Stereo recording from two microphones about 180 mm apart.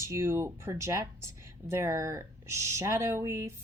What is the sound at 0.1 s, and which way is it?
Speech, 15° right (ahead or behind).